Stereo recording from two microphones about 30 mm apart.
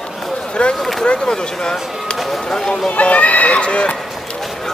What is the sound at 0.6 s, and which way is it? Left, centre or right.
Speech, left.